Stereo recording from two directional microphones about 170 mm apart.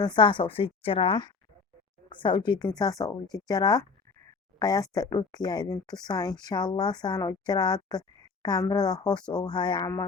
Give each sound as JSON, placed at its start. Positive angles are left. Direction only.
{"t": 0.0, "sound": "a woman's voice", "side_deg": 25}